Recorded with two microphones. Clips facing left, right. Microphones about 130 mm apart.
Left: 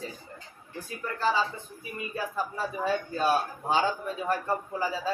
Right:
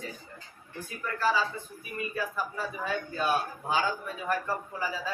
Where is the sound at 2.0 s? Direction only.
30° left (ahead or behind).